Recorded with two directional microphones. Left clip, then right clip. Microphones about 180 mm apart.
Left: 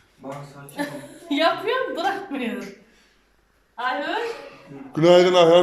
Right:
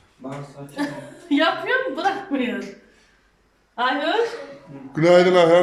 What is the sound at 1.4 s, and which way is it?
Speech, 20° left (ahead or behind).